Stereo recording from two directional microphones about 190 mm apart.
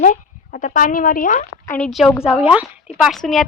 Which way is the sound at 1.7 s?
5° left (ahead or behind).